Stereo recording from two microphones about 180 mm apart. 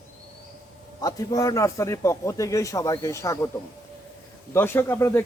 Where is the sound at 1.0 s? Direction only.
20° left (ahead or behind).